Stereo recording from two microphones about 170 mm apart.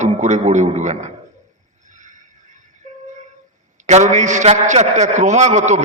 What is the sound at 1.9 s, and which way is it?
Neigh, 50° right (ahead or behind).